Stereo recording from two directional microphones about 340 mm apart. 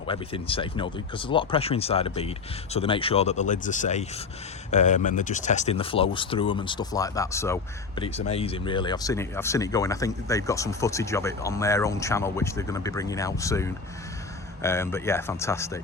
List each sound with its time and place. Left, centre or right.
0.1 s speech: centre